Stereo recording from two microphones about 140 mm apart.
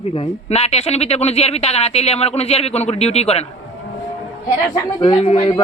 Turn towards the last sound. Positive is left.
turn(degrees=35)  # may be behind; listen again after turning